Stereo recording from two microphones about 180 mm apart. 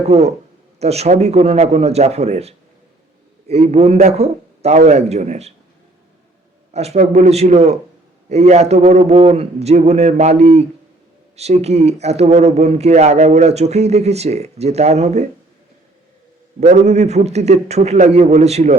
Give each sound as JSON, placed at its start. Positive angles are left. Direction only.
{"t": 0.0, "sound": "a man's voice", "side_deg": -35}
{"t": 6.7, "sound": "speech", "side_deg": -35}
{"t": 16.6, "sound": "speech", "side_deg": -40}